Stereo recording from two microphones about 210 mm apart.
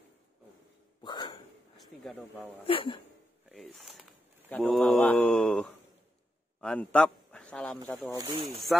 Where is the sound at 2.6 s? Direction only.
25° left (ahead or behind).